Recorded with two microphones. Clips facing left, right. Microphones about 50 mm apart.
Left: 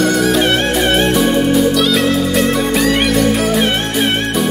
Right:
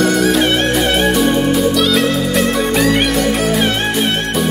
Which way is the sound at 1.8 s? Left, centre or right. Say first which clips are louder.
Even; centre.